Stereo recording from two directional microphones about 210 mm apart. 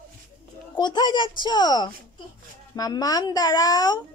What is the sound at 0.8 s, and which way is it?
A child's voice, 20° left (ahead or behind).